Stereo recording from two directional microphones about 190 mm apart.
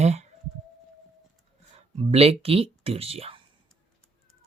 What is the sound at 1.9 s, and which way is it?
Speech, 30° right (ahead or behind).